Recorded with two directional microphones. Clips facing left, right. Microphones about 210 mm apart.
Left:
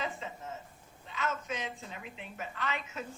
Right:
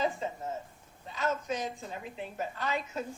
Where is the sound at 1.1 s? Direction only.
35° right (ahead or behind).